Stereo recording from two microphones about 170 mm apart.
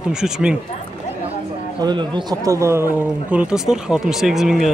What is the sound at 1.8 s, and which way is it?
A man's voice, 25° right (ahead or behind).